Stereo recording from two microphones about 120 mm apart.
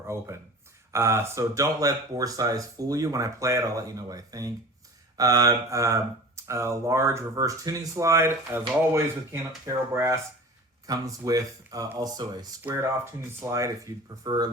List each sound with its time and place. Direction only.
0.1 s speech: 20° right (ahead or behind)
12.6 s speech: 25° right (ahead or behind)